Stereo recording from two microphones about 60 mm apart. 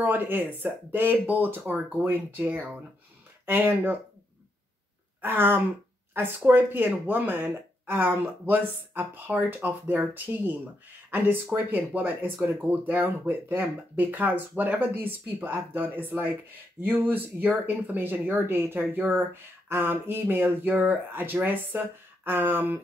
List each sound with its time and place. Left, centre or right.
0.0 s speech: right
5.2 s speech: right